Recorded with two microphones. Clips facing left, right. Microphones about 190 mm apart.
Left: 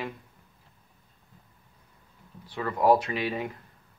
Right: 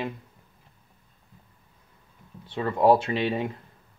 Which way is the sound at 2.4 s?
25° right (ahead or behind).